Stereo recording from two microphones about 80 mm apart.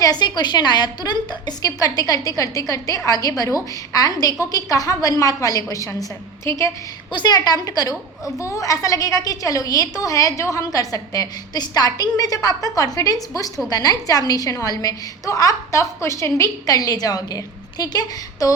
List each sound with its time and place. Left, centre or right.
0.0 s a woman's voice: left
7.1 s a woman's voice: left